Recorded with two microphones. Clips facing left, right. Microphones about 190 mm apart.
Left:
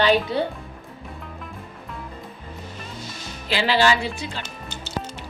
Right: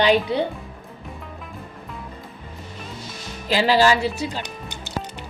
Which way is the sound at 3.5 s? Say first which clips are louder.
Right 3 dB; 40° right (ahead or behind).